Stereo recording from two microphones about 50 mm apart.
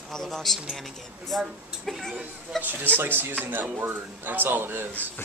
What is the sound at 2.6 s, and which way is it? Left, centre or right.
A man's voice, right.